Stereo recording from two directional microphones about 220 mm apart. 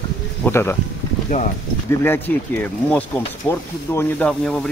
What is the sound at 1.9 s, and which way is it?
Speech, 10° left (ahead or behind).